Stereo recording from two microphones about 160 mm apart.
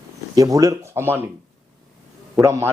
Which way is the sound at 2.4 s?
15° right (ahead or behind).